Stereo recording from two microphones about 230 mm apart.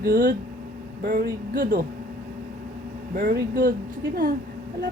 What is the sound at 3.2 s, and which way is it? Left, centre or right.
Speech, right.